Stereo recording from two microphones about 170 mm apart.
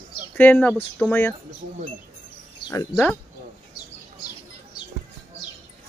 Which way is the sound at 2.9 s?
5° left (ahead or behind).